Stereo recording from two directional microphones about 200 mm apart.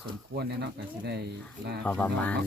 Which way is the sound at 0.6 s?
55° right (ahead or behind).